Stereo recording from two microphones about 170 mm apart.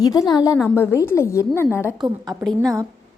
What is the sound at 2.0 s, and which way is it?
Speech, 25° right (ahead or behind).